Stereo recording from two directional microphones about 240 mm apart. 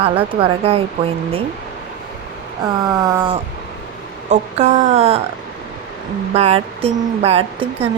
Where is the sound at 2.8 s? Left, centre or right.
Centre.